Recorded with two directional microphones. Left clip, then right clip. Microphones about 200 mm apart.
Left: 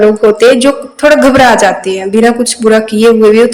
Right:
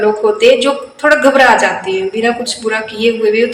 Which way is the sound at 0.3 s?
45° left (ahead or behind).